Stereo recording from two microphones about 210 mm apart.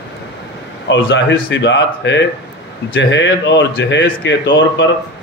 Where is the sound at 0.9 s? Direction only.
60° left (ahead or behind).